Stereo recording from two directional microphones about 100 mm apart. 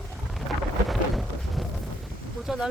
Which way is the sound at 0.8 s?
Centre (ahead or behind).